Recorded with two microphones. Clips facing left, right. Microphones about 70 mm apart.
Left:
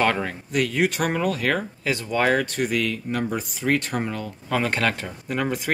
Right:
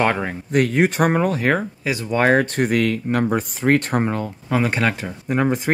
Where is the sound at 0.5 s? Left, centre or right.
Right; by 2.1 s centre.